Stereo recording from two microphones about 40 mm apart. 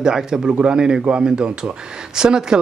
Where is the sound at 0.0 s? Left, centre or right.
Centre.